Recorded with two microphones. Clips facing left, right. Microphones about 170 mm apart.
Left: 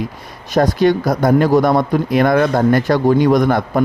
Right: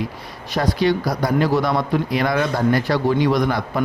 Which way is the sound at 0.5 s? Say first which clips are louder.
Left 6 dB; 45° left (ahead or behind).